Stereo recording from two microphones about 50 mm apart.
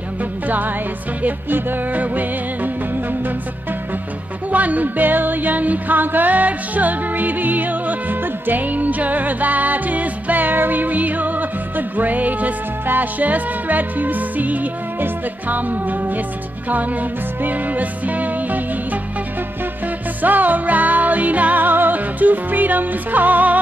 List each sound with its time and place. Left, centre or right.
0.2 s music: right
4.5 s music: right
20.2 s music: right